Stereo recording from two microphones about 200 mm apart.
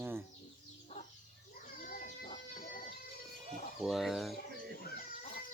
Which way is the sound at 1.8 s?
45° left (ahead or behind).